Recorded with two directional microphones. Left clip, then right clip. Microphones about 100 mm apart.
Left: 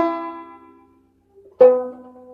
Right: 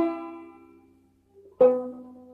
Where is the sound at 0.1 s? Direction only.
10° left (ahead or behind).